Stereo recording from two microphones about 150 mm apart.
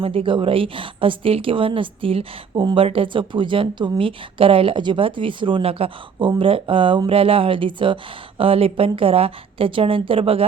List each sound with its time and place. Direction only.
0.0 s a woman's voice: 35° right (ahead or behind)